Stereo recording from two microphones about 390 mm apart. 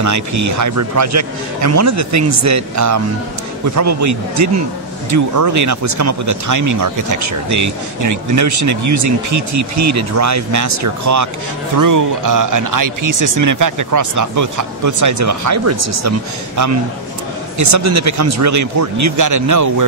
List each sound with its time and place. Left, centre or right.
0.0 s speech: right
17.6 s speech: right